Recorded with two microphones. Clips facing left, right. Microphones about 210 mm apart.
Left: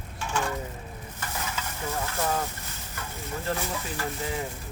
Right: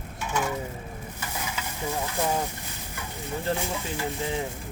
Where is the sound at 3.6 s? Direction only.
15° right (ahead or behind).